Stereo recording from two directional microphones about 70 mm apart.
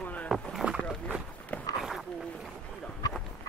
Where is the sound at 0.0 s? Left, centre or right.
Left.